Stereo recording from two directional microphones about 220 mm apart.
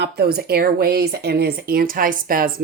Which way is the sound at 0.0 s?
45° right (ahead or behind).